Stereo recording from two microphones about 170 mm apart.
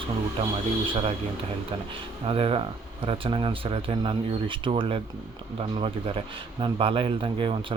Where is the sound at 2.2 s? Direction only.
35° right (ahead or behind).